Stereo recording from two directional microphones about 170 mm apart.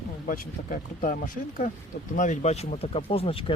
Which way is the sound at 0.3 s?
50° left (ahead or behind).